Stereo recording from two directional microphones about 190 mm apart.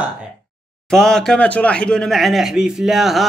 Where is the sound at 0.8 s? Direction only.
5° left (ahead or behind).